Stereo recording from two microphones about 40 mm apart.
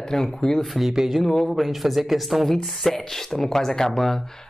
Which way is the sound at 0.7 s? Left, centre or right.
Centre.